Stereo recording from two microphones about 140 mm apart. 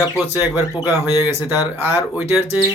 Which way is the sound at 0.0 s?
10° right (ahead or behind).